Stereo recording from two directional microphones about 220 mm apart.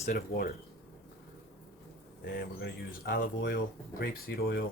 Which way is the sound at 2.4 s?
45° left (ahead or behind).